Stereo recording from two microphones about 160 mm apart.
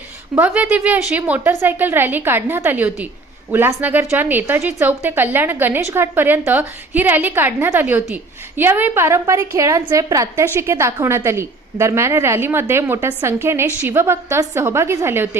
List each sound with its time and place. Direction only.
0.3 s a woman's voice: 10° right (ahead or behind)